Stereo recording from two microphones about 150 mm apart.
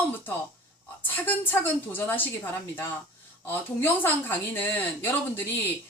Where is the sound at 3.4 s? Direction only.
15° left (ahead or behind).